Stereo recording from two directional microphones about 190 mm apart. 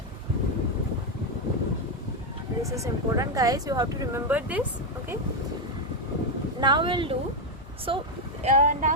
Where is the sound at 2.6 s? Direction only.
15° right (ahead or behind).